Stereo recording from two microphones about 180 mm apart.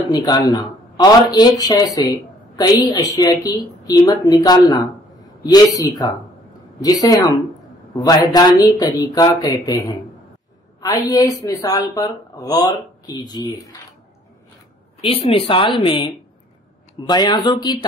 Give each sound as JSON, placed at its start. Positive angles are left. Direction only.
{"t": 0.1, "sound": "speech", "side_deg": 20}
{"t": 15.0, "sound": "speech", "side_deg": 30}